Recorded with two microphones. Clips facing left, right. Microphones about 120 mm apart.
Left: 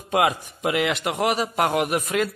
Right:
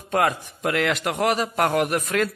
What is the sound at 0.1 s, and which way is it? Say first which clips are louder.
A man's voice: left 1 dB; 10° left (ahead or behind).